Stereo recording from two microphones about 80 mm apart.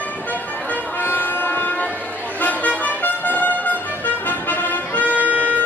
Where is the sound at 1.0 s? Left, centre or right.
Left.